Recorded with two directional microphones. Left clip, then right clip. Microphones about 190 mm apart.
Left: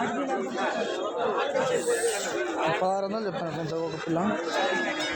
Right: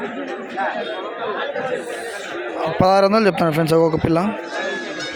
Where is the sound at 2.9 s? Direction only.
50° right (ahead or behind).